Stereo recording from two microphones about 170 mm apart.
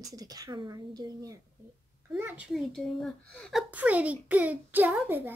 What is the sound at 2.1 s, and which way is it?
A woman's voice, 5° right (ahead or behind).